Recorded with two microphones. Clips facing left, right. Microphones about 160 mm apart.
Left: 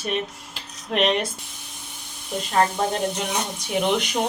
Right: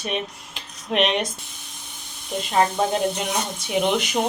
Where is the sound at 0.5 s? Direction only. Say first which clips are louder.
Right 1 dB; centre (ahead or behind).